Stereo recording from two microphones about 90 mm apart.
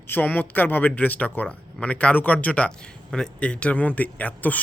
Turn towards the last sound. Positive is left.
turn(degrees=15)  # may be behind; listen again after turning